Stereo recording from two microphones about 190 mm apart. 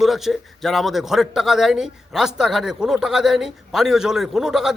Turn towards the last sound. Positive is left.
turn(degrees=0)  # may be behind; listen again after turning